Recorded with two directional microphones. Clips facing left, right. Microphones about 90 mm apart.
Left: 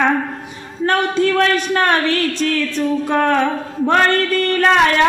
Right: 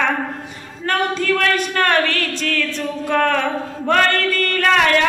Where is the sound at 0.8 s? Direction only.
20° left (ahead or behind).